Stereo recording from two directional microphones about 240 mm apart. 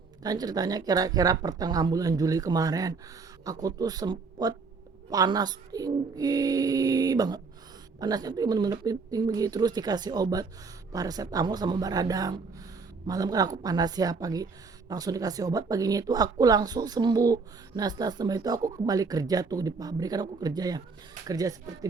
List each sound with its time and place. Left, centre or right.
0.2 s speech: centre